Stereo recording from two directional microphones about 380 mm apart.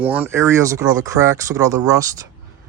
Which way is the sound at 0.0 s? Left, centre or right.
Centre.